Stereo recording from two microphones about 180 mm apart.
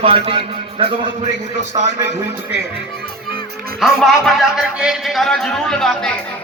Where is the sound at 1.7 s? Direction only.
20° right (ahead or behind).